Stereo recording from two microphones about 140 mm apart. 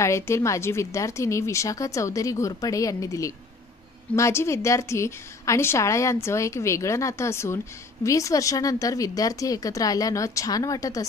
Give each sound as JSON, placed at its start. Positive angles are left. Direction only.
{"t": 0.0, "sound": "a woman's voice", "side_deg": 20}